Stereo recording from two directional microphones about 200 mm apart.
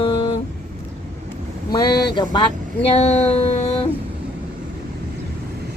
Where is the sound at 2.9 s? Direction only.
35° left (ahead or behind).